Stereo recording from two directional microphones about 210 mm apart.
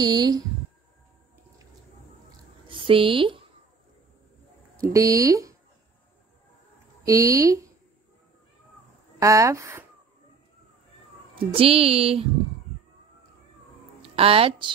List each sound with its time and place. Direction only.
0.0 s a woman's voice: 20° right (ahead or behind)
2.7 s speech: 25° right (ahead or behind)
4.9 s speech: 15° right (ahead or behind)
7.1 s speech: 15° right (ahead or behind)
9.2 s speech: 15° right (ahead or behind)
11.3 s a woman's voice: 25° right (ahead or behind)
14.0 s speech: 25° right (ahead or behind)